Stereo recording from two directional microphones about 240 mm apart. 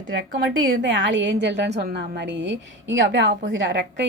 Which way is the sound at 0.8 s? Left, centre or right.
Right.